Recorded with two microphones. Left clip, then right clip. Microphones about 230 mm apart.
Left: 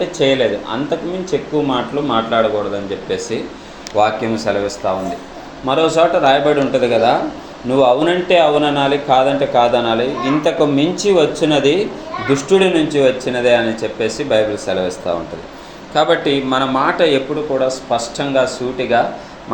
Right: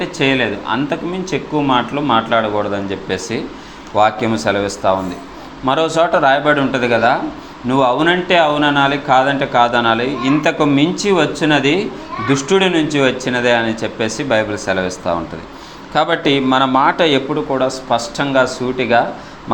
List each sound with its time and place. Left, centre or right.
0.0 s a man's voice: right